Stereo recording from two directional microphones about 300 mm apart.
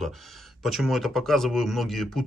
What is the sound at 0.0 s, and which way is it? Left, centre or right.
Speech, centre.